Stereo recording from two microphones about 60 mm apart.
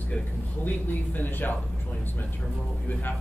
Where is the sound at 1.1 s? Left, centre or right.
Left.